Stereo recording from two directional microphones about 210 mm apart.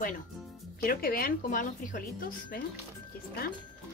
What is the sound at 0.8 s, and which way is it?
A woman's voice, 45° left (ahead or behind).